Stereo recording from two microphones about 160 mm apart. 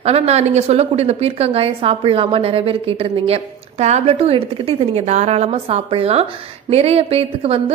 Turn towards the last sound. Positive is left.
turn(degrees=-40)  # may be behind; listen again after turning